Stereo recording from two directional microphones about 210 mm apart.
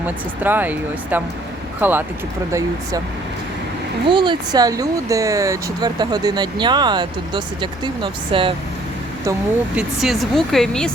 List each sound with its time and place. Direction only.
0.0 s speech: 10° right (ahead or behind)
4.1 s speech: 20° right (ahead or behind)
9.7 s speech: centre (ahead or behind)